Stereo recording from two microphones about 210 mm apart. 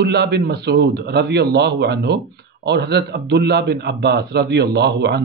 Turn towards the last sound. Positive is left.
turn(degrees=-55)  # may be behind; listen again after turning